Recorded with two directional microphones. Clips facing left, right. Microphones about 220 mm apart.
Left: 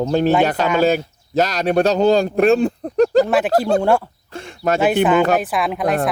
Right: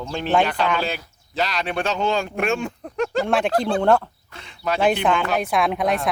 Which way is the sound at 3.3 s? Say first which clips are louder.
Left 3 dB; 5° left (ahead or behind).